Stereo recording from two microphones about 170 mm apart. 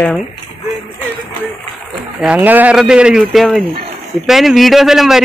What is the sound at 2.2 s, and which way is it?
Speech, 10° right (ahead or behind).